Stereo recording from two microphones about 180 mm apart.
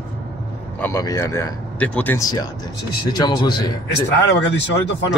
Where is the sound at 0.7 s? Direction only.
15° left (ahead or behind).